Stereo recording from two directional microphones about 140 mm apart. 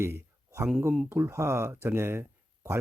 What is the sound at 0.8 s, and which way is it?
Speech, 15° right (ahead or behind).